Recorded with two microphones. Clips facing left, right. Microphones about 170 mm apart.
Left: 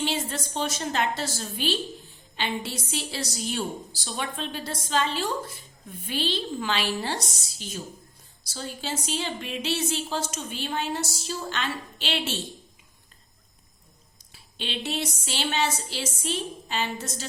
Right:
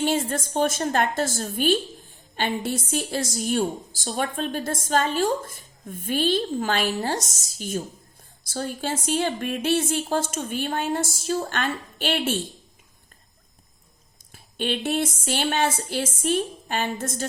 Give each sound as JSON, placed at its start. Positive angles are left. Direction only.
{"t": 0.0, "sound": "a woman's voice", "side_deg": -50}
{"t": 14.3, "sound": "a woman's voice", "side_deg": -50}